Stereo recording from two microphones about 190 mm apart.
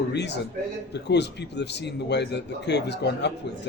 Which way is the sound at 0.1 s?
65° left (ahead or behind).